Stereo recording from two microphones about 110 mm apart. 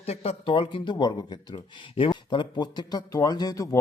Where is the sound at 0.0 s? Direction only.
70° left (ahead or behind); by 1.6 s 40° left (ahead or behind).